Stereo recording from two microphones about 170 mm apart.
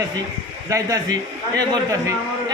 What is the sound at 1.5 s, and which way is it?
Speech, 20° right (ahead or behind).